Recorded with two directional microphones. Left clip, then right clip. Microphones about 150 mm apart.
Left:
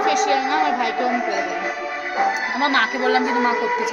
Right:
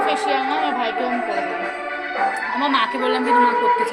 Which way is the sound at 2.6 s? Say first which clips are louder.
Even; 15° left (ahead or behind).